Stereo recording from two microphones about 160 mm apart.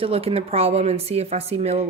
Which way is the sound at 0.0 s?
35° right (ahead or behind).